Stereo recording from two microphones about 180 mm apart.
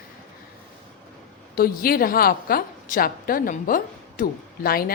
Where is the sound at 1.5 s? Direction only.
55° left (ahead or behind).